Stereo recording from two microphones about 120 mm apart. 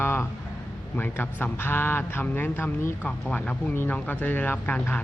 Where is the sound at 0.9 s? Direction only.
15° left (ahead or behind).